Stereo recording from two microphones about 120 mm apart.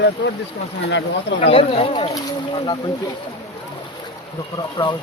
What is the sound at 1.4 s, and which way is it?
Speech, 55° left (ahead or behind).